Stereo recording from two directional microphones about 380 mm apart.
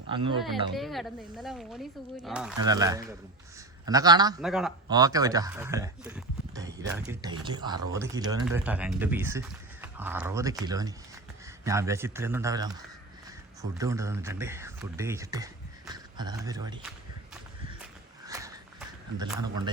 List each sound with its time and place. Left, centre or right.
0.1 s speech: centre
0.7 s speech: centre
18.3 s a sound: centre